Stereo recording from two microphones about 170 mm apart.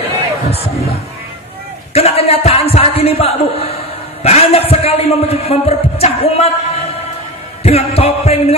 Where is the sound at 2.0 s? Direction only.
35° left (ahead or behind).